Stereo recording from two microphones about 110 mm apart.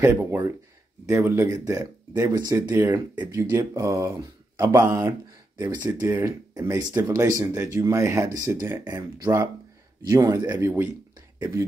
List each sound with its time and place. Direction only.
0.0 s speech: 20° right (ahead or behind)
2.7 s speech: 20° right (ahead or behind)
5.6 s speech: 35° right (ahead or behind)
5.9 s speech: 25° right (ahead or behind)
10.5 s speech: 20° right (ahead or behind)